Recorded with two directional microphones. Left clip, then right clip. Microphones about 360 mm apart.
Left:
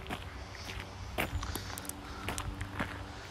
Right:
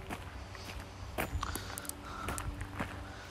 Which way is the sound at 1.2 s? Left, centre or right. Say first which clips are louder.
Left 1 dB; centre.